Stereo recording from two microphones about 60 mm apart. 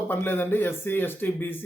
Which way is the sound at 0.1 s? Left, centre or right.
Left.